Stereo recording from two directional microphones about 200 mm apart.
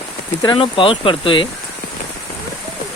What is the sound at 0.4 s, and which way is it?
Speech, 25° left (ahead or behind).